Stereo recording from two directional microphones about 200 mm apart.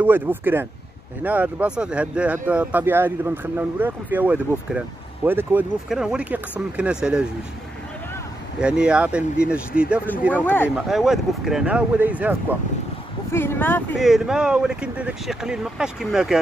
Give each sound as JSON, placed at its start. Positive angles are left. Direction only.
{"t": 0.0, "sound": "speech", "side_deg": -10}
{"t": 8.5, "sound": "speech", "side_deg": -5}
{"t": 10.3, "sound": "speech", "side_deg": 10}
{"t": 10.9, "sound": "speech", "side_deg": 0}
{"t": 13.3, "sound": "speech", "side_deg": 10}
{"t": 13.9, "sound": "speech", "side_deg": 0}